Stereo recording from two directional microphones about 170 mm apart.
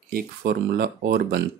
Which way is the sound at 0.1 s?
65° right (ahead or behind).